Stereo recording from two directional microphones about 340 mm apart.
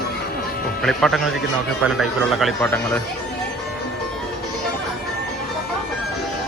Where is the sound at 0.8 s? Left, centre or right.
Centre.